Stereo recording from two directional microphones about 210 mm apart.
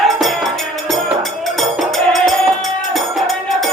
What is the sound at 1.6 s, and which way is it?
Music, centre (ahead or behind).